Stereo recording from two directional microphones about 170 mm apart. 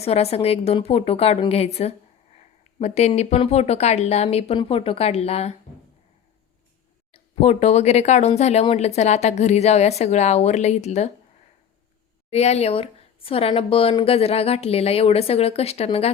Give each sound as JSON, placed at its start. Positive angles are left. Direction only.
{"t": 0.0, "sound": "speech", "side_deg": 35}
{"t": 7.1, "sound": "speech", "side_deg": 35}
{"t": 12.3, "sound": "speech", "side_deg": 40}